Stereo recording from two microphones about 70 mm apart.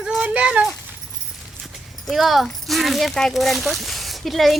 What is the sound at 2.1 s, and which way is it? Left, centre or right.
A child's voice, centre.